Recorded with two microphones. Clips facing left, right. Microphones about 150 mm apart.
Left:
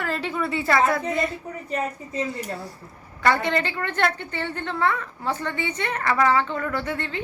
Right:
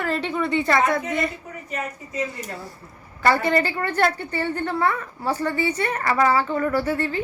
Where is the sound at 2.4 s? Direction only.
Centre (ahead or behind).